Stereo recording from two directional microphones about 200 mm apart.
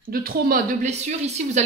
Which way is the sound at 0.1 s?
45° right (ahead or behind).